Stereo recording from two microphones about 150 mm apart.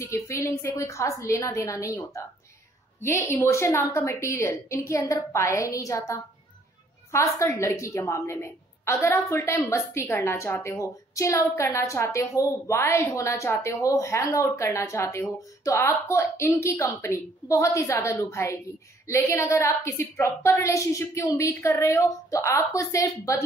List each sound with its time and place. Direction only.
0.0 s a woman's voice: 20° left (ahead or behind)
3.0 s a woman's voice: 15° left (ahead or behind)